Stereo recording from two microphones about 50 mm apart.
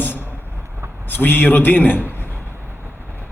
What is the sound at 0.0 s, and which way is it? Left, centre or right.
Vehicle, left.